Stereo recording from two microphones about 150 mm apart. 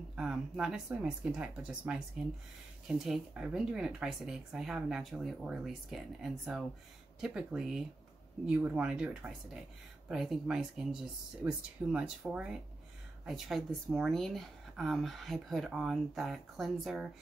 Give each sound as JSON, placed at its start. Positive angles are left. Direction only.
{"t": 0.1, "sound": "speech", "side_deg": -5}
{"t": 3.0, "sound": "speech", "side_deg": -5}